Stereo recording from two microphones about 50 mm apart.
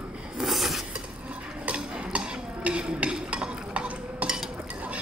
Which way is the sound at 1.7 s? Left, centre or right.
Right.